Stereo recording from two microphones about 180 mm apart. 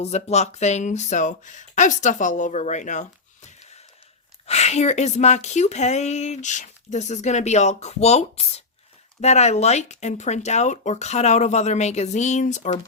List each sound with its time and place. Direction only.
0.0 s speech: 40° left (ahead or behind)